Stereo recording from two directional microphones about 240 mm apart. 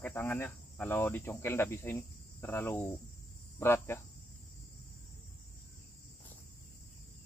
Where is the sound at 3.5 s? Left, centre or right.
Centre.